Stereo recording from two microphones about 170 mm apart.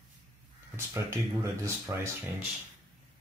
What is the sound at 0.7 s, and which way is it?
Speech, 15° right (ahead or behind).